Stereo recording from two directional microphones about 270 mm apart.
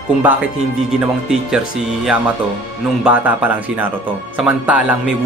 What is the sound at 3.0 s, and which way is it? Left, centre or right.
Speech, centre.